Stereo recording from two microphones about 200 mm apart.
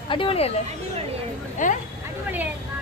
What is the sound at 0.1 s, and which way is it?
Speech, 25° left (ahead or behind).